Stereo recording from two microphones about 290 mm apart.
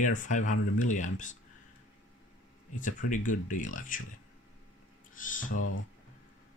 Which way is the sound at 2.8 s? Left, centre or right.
Left.